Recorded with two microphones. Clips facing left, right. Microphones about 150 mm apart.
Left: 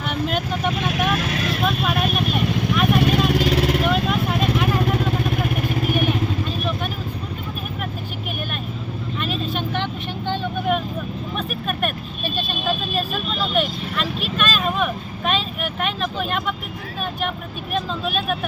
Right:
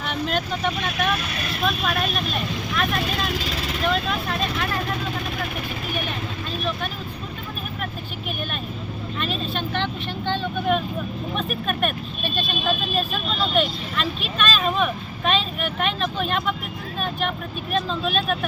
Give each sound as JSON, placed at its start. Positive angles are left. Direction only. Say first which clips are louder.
{"t": 0.1, "sound": "speech", "louder": "left 2 dB", "side_deg": 5}
{"t": 3.2, "sound": "vehicle", "louder": "left 9 dB", "side_deg": 60}
{"t": 3.8, "sound": "vehicle", "louder": "left 3 dB", "side_deg": 10}
{"t": 9.2, "sound": "vehicle", "louder": "left 2 dB", "side_deg": 10}
{"t": 13.6, "sound": "speech", "louder": "left 1 dB", "side_deg": 5}